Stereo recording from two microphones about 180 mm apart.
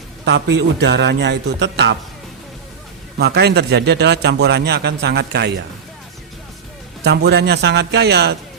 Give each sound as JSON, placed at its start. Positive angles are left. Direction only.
{"t": 0.3, "sound": "a man's voice", "side_deg": -75}
{"t": 3.2, "sound": "a man's voice", "side_deg": -65}
{"t": 7.0, "sound": "a man's voice", "side_deg": -70}